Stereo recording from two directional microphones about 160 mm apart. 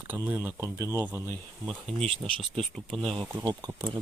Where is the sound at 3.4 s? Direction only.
25° right (ahead or behind).